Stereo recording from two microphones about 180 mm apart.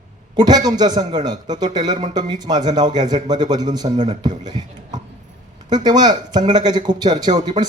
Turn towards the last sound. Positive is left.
turn(degrees=-25)  # may be behind; listen again after turning